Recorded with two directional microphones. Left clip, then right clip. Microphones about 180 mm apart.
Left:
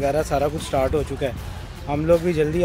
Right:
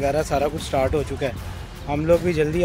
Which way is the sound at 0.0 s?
Centre (ahead or behind).